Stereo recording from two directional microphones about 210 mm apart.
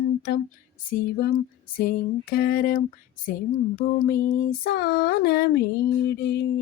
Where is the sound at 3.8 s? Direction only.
45° left (ahead or behind).